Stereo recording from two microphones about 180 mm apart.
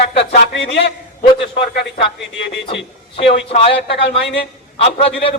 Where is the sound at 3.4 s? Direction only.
35° left (ahead or behind).